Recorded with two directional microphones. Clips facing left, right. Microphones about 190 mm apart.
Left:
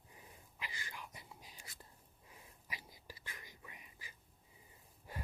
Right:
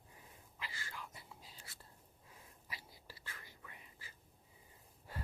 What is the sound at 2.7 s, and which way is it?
Whispering, 15° left (ahead or behind).